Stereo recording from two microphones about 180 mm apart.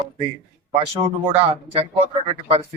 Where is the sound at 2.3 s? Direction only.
35° right (ahead or behind).